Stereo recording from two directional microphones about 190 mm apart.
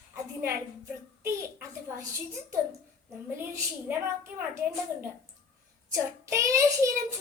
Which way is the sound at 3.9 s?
10° right (ahead or behind).